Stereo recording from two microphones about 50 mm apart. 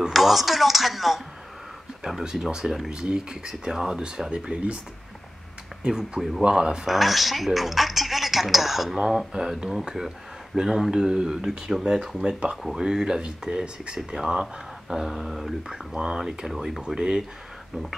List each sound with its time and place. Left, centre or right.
0.1 s speech: centre; by 4.7 s right
5.9 s speech: centre
6.9 s speech: centre